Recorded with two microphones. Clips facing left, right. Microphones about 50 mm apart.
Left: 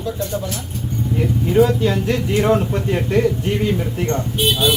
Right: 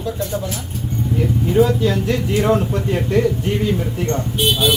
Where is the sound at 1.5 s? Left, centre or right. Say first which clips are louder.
Left 1 dB; centre.